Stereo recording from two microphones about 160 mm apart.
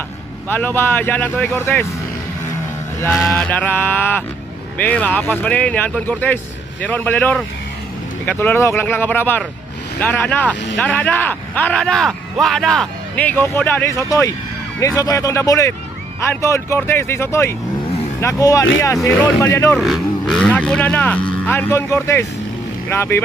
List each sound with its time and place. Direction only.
0.4 s speech: 10° left (ahead or behind)
3.1 s speech: centre (ahead or behind); by 19.7 s 20° left (ahead or behind)
19.7 s speech: centre (ahead or behind)